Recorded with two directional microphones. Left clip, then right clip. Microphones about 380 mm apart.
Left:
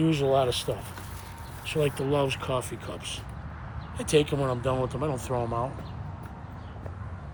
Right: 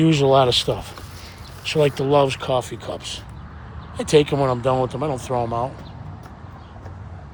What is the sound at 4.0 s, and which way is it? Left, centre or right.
Speech, centre.